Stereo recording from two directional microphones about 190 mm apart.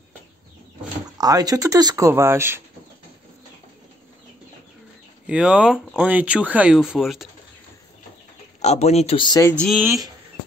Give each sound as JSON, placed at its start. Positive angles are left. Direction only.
{"t": 1.1, "sound": "speech", "side_deg": -20}
{"t": 5.2, "sound": "speech", "side_deg": -5}
{"t": 8.5, "sound": "speech", "side_deg": 35}
{"t": 9.5, "sound": "speech", "side_deg": 5}
{"t": 9.8, "sound": "speech", "side_deg": -15}